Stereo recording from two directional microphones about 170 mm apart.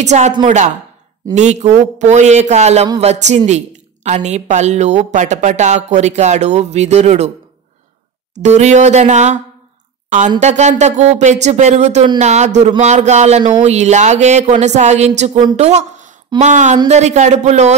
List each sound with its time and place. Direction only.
0.0 s speech: 40° right (ahead or behind)
1.3 s a woman's voice: 45° right (ahead or behind)
8.4 s a woman's voice: 40° right (ahead or behind)